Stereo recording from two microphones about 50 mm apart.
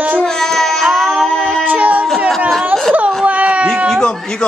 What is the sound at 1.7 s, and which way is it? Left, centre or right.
Music, right.